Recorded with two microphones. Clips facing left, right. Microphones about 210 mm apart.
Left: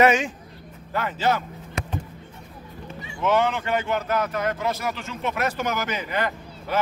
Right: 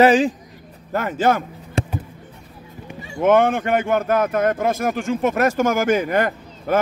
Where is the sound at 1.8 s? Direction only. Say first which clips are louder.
Right 8 dB; 30° right (ahead or behind).